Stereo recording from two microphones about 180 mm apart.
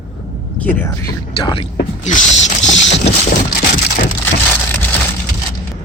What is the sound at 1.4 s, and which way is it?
Speech, 25° left (ahead or behind).